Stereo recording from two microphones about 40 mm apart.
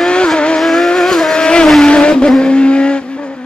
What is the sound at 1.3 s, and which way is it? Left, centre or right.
Vehicle, left.